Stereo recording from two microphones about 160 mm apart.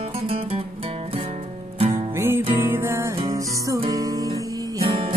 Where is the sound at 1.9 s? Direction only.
15° right (ahead or behind).